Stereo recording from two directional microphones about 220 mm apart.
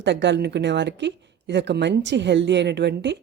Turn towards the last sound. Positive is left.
turn(degrees=-50)  # may be behind; listen again after turning